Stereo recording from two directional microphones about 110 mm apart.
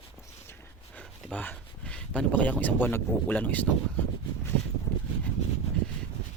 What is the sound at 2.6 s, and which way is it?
Speech, 15° left (ahead or behind).